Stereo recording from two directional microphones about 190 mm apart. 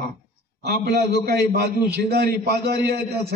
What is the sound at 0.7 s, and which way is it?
A man's voice, 60° right (ahead or behind).